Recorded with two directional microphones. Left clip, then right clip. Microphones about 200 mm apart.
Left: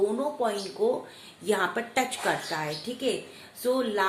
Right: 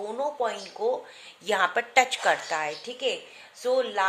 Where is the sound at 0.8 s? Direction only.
30° right (ahead or behind).